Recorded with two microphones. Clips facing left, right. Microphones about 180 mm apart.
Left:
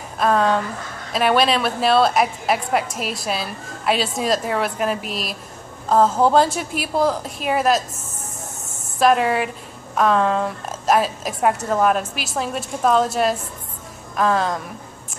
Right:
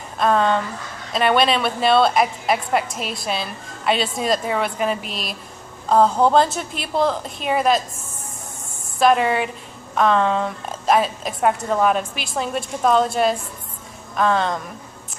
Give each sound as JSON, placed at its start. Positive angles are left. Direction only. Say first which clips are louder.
{"t": 0.2, "sound": "a woman's voice", "louder": "even", "side_deg": 5}
{"t": 8.6, "sound": "a sound", "louder": "left 1 dB", "side_deg": 45}
{"t": 9.0, "sound": "a woman's voice", "louder": "even", "side_deg": 0}